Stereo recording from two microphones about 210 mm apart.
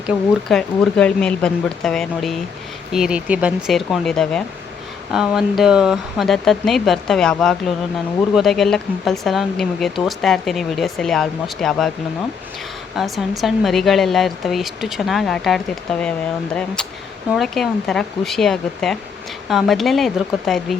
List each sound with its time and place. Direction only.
0.4 s speech: 5° left (ahead or behind)
13.0 s speech: centre (ahead or behind)
17.3 s speech: centre (ahead or behind)